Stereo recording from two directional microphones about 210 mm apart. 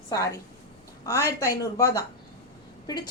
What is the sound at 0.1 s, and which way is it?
A woman's voice, 15° left (ahead or behind).